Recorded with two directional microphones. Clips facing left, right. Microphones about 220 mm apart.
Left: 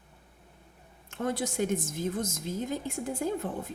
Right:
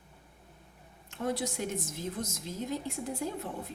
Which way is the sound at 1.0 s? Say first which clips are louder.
Left 2 dB; 50° left (ahead or behind).